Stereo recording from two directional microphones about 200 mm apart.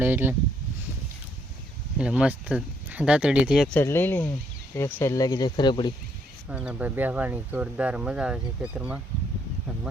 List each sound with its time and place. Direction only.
0.0 s speech: 10° right (ahead or behind)
2.0 s speech: 5° right (ahead or behind)
3.8 s speech: 10° left (ahead or behind)
6.5 s speech: 5° right (ahead or behind)